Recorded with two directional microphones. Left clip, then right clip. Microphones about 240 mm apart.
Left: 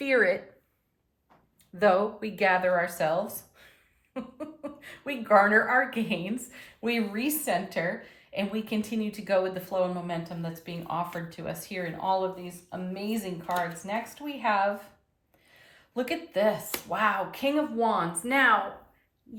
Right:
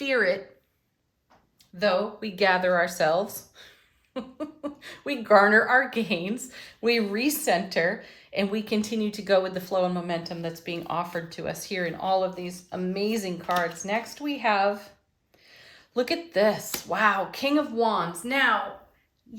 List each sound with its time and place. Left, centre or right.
0.0 s speech: centre
1.7 s speech: centre
2.4 s speech: centre
16.0 s speech: right; by 18.5 s centre